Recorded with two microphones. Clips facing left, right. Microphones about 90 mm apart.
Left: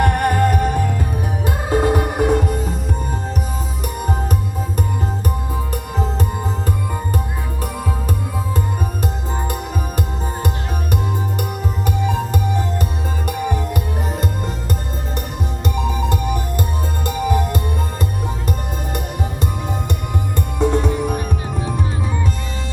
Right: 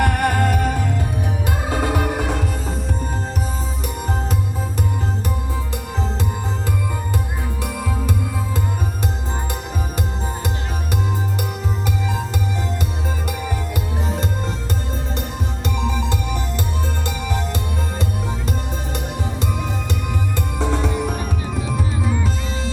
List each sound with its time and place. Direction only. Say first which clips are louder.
0.0 s music: left 2 dB; 40° left (ahead or behind)
5.7 s music: left 3 dB; 45° left (ahead or behind)
11.9 s music: left 6 dB; 45° left (ahead or behind)
15.6 s music: left 2 dB; 45° left (ahead or behind)
20.6 s music: left 5 dB; 45° left (ahead or behind)